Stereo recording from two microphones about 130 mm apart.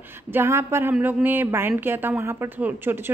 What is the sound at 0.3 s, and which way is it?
Speech, 20° right (ahead or behind).